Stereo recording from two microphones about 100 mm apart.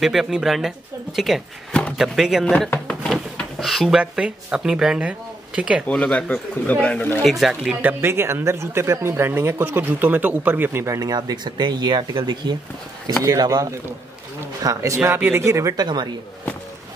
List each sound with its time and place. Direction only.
0.0 s speech: 5° right (ahead or behind)
1.7 s a sound: 10° left (ahead or behind)
2.0 s speech: 5° right (ahead or behind)
2.7 s drawer open or close: 10° left (ahead or behind)
3.1 s drawer open or close: centre (ahead or behind)
4.0 s speech: 10° right (ahead or behind)
5.9 s speech: 10° left (ahead or behind)
7.2 s speech: centre (ahead or behind)
7.8 s speech: 25° right (ahead or behind)
11.0 s speech: 40° right (ahead or behind)
13.2 s speech: 35° right (ahead or behind)
15.0 s speech: 20° right (ahead or behind)
15.7 s speech: 45° right (ahead or behind)